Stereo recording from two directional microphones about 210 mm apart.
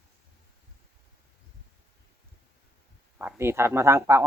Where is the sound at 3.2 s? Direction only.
10° right (ahead or behind).